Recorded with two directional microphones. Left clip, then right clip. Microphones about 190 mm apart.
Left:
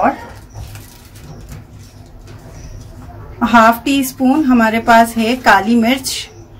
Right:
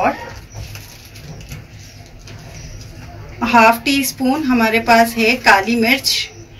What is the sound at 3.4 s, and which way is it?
A woman's voice, 35° left (ahead or behind).